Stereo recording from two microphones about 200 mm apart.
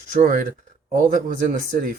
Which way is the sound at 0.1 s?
40° right (ahead or behind).